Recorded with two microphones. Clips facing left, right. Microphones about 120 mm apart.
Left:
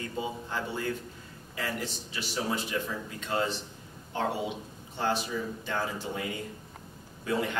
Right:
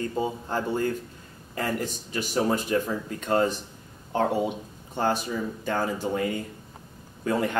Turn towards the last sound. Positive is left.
turn(degrees=-45)  # may be behind; listen again after turning